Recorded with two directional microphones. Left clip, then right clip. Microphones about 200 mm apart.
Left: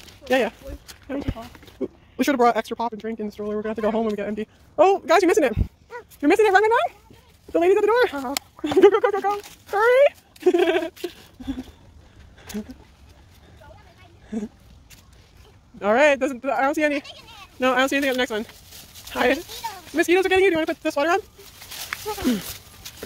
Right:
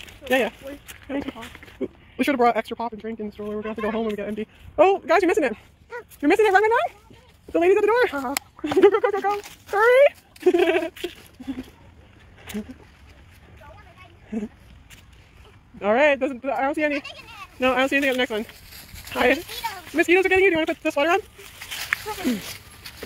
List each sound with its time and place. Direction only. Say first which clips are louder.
0.3 s speech: left 1 dB; 10° left (ahead or behind); by 4.1 s 30° left (ahead or behind)
4.1 s speech: left 1 dB; 20° left (ahead or behind)
8.6 s speech: left 2 dB; 15° left (ahead or behind)
9.3 s speech: even; 5° right (ahead or behind)
12.4 s a sound: even; 5° left (ahead or behind)
14.3 s speech: even; 5° left (ahead or behind)
15.8 s speech: left 1 dB; 10° left (ahead or behind)
16.9 s speech: even; 10° right (ahead or behind)
17.6 s speech: even; 10° left (ahead or behind)
22.0 s a sound: left 2 dB; 35° left (ahead or behind)